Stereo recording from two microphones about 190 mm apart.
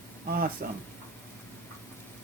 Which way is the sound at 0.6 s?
50° right (ahead or behind).